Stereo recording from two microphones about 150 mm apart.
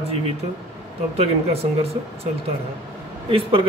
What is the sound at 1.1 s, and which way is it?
Speech, 45° right (ahead or behind).